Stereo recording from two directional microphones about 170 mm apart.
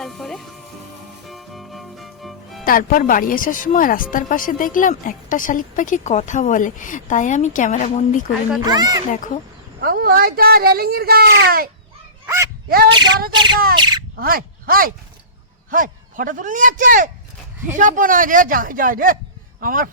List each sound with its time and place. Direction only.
0.0 s speech: centre (ahead or behind)
1.3 s music: centre (ahead or behind)
2.6 s speech: 55° left (ahead or behind)
8.6 s speech: 25° right (ahead or behind)
9.8 s speech: 60° right (ahead or behind)
12.2 s a sound: 15° right (ahead or behind)
13.3 s speech: 25° right (ahead or behind)
14.2 s a man's voice: 60° right (ahead or behind)